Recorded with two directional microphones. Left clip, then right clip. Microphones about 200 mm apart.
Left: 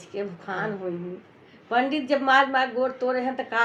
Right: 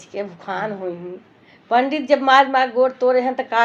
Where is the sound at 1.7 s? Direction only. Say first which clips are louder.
Right 7 dB; 30° right (ahead or behind).